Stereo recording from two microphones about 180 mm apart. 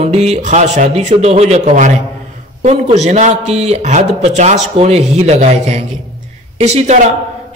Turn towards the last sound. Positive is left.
turn(degrees=-40)  # may be behind; listen again after turning